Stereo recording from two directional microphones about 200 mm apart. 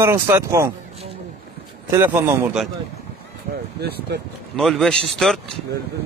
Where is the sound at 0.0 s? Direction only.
15° right (ahead or behind).